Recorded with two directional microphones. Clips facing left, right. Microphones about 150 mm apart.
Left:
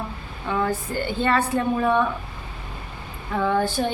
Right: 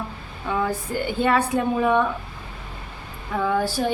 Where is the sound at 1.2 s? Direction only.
10° right (ahead or behind).